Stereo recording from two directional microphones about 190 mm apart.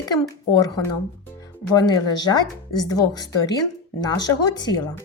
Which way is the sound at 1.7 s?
20° left (ahead or behind).